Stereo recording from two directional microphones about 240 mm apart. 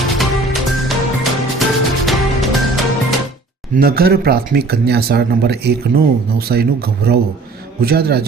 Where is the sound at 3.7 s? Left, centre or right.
Right.